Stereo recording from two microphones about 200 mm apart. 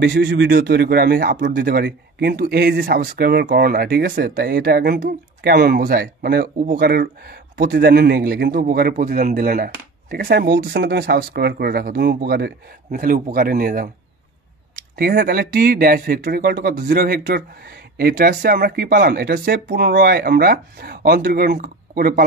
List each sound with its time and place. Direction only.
0.0 s speech: 60° right (ahead or behind)
15.0 s speech: 50° right (ahead or behind)